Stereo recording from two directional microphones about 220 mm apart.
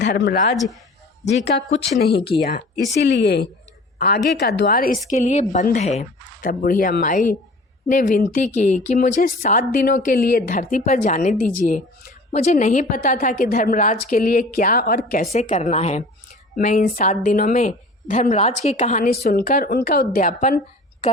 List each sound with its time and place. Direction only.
0.0 s speech: 45° left (ahead or behind)
0.5 s speech: centre (ahead or behind)
1.3 s speech: 50° left (ahead or behind)